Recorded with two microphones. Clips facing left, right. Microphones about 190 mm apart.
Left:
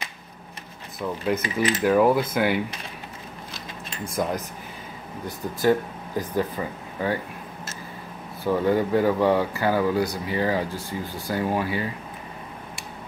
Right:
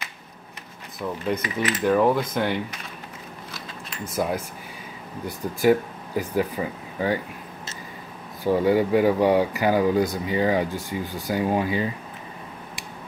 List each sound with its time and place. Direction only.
0.9 s speech: 5° left (ahead or behind)
1.9 s cutlery: 5° left (ahead or behind)
4.1 s speech: 5° right (ahead or behind)
8.5 s speech: 10° right (ahead or behind)